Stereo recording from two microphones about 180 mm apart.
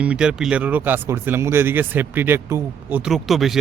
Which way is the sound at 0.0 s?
5° right (ahead or behind).